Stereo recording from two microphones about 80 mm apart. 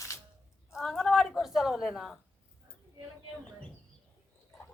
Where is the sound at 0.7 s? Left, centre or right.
Centre.